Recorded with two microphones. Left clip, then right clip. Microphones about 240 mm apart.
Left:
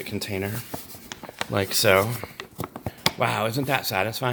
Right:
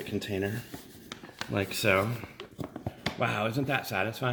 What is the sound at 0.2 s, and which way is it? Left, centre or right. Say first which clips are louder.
Speech: left 2 dB; left.